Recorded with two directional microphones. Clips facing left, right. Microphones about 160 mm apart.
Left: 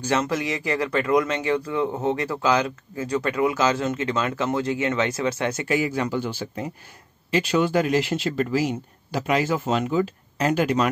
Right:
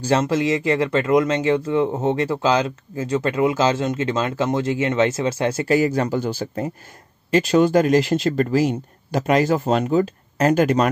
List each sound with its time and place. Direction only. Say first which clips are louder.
0.0 s speech: right 5 dB; 30° right (ahead or behind); by 10.9 s 45° right (ahead or behind)